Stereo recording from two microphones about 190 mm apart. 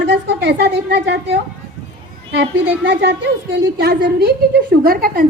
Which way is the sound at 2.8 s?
60° right (ahead or behind).